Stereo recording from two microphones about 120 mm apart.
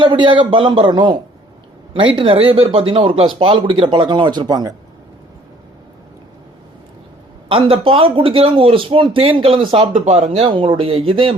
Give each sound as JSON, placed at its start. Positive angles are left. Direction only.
{"t": 0.0, "sound": "a man's voice", "side_deg": -40}
{"t": 7.4, "sound": "speech", "side_deg": -50}
{"t": 9.9, "sound": "speech", "side_deg": -65}
{"t": 10.4, "sound": "speech", "side_deg": -45}